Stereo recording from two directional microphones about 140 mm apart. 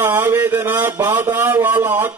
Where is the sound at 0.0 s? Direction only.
15° right (ahead or behind).